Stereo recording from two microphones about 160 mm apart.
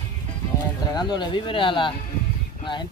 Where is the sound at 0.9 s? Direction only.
25° left (ahead or behind).